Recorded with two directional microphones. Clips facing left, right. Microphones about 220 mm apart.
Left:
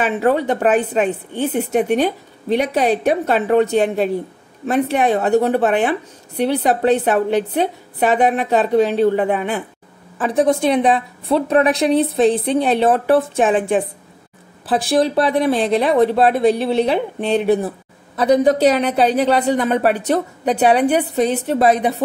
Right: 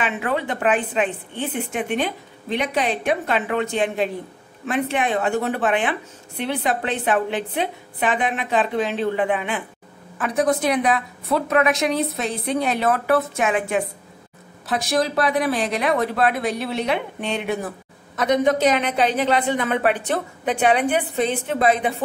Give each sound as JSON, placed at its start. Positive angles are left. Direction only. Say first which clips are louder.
{"t": 0.0, "sound": "a woman's voice", "louder": "left 7 dB", "side_deg": 40}
{"t": 10.1, "sound": "a woman's voice", "louder": "left 4 dB", "side_deg": 30}